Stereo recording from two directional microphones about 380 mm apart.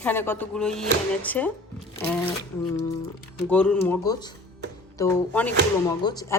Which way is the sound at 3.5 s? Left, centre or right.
Centre.